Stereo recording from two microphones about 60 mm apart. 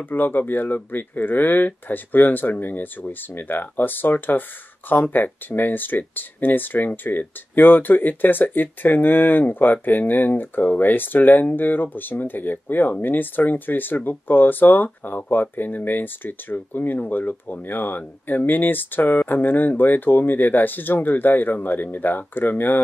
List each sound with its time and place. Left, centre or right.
0.0 s speech: left